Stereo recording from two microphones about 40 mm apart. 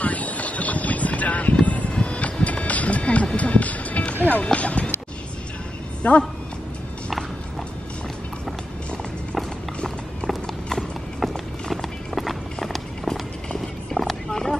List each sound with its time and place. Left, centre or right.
0.0 s vehicle: left
4.5 s a sound: left
6.0 s speech: left
10.2 s clip-clop: centre
11.7 s music: centre
12.5 s run: centre
13.9 s horse: left
14.3 s a sound: centre